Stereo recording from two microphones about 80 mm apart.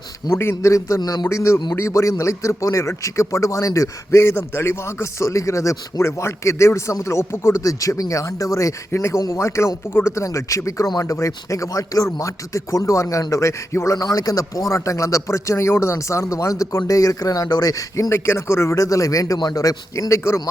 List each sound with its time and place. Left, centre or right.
0.3 s a man's voice: left
0.5 s a man's voice: left
1.3 s a man's voice: left
18.1 s a man's voice: left